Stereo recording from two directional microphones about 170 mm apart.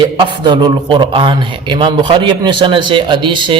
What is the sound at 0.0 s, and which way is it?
A man's voice, 30° right (ahead or behind).